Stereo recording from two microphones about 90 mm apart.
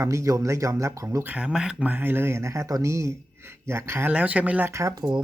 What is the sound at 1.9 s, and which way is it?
Speech, 25° right (ahead or behind).